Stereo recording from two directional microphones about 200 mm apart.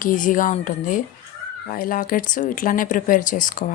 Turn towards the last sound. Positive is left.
turn(degrees=40)  # may be behind; listen again after turning